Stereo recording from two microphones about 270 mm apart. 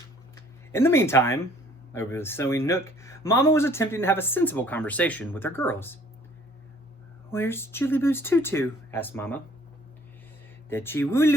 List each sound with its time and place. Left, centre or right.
0.7 s speech: centre
7.3 s speech: centre
10.7 s speech: centre